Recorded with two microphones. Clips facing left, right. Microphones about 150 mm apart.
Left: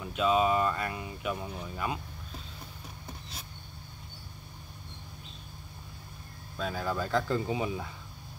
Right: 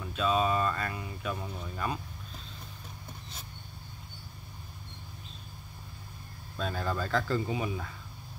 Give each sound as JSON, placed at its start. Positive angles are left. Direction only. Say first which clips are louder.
{"t": 0.0, "sound": "speech", "louder": "left 2 dB", "side_deg": 15}
{"t": 6.6, "sound": "speech", "louder": "left 1 dB", "side_deg": 5}